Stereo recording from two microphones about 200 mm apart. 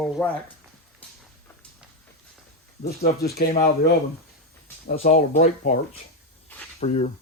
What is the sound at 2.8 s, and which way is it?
Speech, 50° left (ahead or behind).